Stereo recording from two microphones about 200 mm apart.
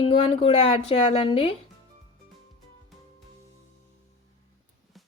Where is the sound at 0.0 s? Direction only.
30° left (ahead or behind).